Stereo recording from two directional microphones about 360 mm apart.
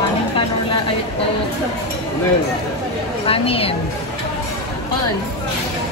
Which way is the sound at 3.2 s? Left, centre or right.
Centre.